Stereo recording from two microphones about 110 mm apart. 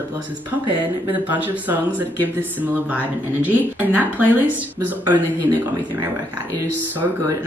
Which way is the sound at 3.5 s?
15° right (ahead or behind).